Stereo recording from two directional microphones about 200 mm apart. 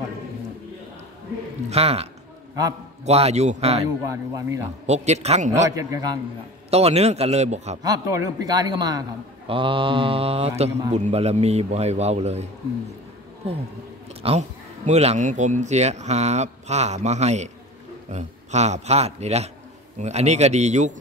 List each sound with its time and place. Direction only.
1.7 s speech: 30° right (ahead or behind)
3.1 s speech: 30° right (ahead or behind)
4.1 s a man's voice: 15° right (ahead or behind)
4.8 s speech: 35° right (ahead or behind)
5.5 s a man's voice: 15° right (ahead or behind)
6.7 s speech: 30° right (ahead or behind)
7.8 s speech: 15° right (ahead or behind); by 20.9 s 35° right (ahead or behind)